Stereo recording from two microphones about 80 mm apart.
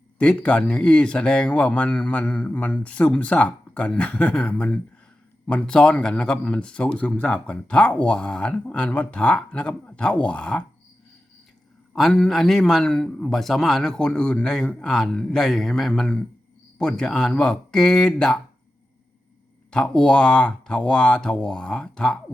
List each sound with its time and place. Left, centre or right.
0.2 s speech: centre
11.9 s speech: centre
19.7 s speech: centre